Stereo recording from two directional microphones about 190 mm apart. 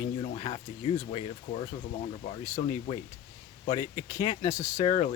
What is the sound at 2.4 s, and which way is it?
Speech, 15° left (ahead or behind).